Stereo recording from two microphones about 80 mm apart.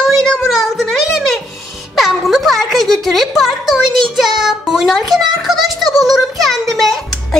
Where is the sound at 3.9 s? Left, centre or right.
Centre.